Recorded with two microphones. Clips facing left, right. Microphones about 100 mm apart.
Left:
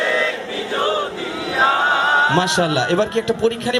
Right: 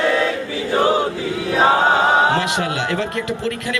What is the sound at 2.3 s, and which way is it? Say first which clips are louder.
A man's voice: left 4 dB; 25° left (ahead or behind).